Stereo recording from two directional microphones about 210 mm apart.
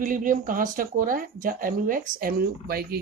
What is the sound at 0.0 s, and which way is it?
Speech, 40° right (ahead or behind).